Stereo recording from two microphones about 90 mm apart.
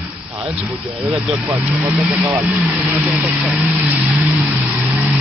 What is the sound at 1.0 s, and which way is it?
Speech, 20° right (ahead or behind).